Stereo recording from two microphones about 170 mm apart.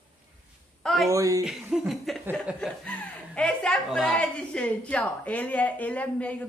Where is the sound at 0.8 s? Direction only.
Centre (ahead or behind).